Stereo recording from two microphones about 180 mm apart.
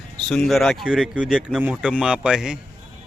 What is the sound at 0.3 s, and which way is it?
A man's voice, centre (ahead or behind).